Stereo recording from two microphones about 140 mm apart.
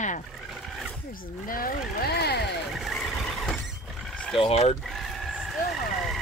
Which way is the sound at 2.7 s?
Centre (ahead or behind).